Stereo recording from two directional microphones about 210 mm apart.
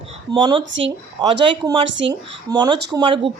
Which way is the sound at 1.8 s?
60° right (ahead or behind).